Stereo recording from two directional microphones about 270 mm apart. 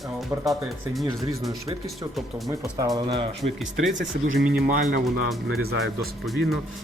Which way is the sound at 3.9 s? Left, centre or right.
Right.